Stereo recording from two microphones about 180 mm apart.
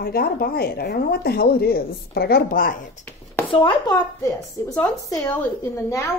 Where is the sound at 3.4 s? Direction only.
25° left (ahead or behind).